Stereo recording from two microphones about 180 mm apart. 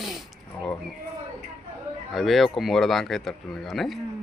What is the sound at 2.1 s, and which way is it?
Speech, centre (ahead or behind).